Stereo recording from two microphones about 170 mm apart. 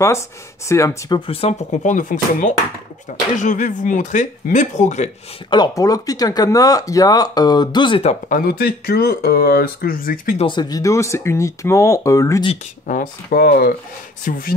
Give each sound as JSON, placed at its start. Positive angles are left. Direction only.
{"t": 0.7, "sound": "speech", "side_deg": 15}
{"t": 1.2, "sound": "speech", "side_deg": 35}
{"t": 5.5, "sound": "speech", "side_deg": 25}
{"t": 8.5, "sound": "speech", "side_deg": 65}
{"t": 10.3, "sound": "speech", "side_deg": 30}
{"t": 12.8, "sound": "speech", "side_deg": 55}
{"t": 14.2, "sound": "speech", "side_deg": 55}